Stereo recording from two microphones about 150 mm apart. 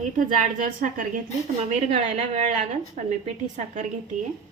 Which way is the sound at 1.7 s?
45° right (ahead or behind).